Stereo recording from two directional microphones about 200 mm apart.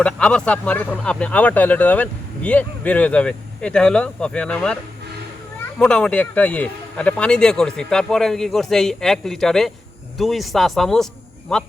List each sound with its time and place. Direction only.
0.0 s speech: 5° left (ahead or behind)
5.8 s speech: 5° left (ahead or behind)